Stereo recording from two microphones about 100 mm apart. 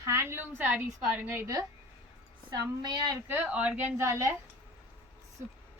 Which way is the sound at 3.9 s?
30° right (ahead or behind).